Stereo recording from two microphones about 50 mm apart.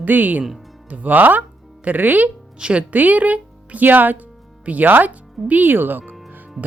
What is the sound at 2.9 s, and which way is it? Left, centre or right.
Speech, right.